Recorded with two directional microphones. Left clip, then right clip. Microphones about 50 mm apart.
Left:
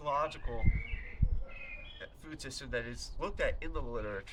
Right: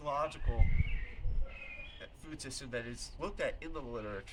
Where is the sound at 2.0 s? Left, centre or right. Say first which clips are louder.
Left 2 dB; left.